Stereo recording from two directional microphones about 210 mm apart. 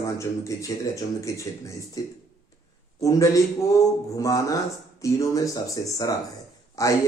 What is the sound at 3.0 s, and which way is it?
Speech, 15° left (ahead or behind).